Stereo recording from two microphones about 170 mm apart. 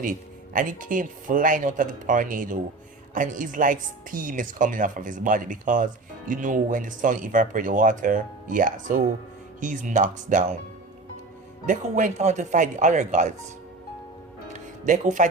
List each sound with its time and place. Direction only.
0.0 s speech: 50° right (ahead or behind)
11.6 s speech: 45° right (ahead or behind)
14.5 s music: 50° right (ahead or behind)